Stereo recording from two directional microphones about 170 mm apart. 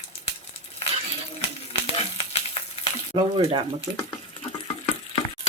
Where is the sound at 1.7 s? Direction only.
35° left (ahead or behind).